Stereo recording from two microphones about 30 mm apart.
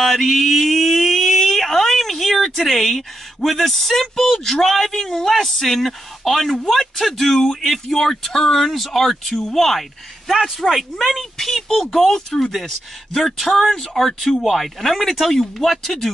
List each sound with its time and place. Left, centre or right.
0.0 s a sound: centre
3.5 s speech: centre
7.3 s speech: centre
7.7 s speech: centre
10.2 s speech: centre